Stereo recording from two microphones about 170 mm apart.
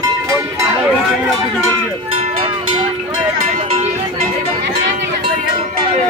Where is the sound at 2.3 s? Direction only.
35° right (ahead or behind).